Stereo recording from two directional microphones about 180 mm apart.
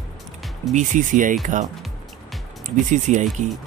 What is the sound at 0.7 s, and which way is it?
Speech, 45° right (ahead or behind).